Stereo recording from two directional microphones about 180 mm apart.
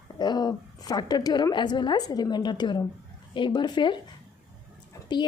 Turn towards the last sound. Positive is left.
turn(degrees=25)  # may be behind; listen again after turning